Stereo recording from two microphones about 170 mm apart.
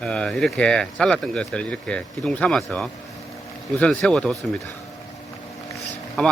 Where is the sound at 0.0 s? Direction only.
5° left (ahead or behind).